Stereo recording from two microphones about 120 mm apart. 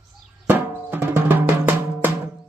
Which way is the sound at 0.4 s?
15° right (ahead or behind).